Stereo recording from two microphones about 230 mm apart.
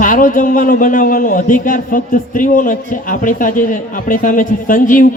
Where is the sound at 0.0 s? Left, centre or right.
Left.